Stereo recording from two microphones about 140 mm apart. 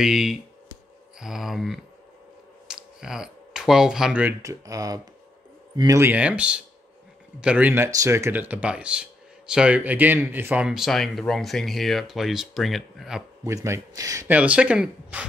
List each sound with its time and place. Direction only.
0.0 s speech: 5° right (ahead or behind)
4.4 s speech: 25° right (ahead or behind); by 13.2 s centre (ahead or behind)
13.4 s speech: 20° right (ahead or behind)
14.3 s speech: 10° right (ahead or behind)